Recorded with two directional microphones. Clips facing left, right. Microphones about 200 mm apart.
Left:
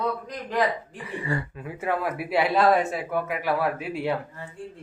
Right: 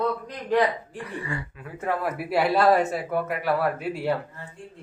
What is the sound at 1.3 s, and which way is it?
Speech, 35° left (ahead or behind).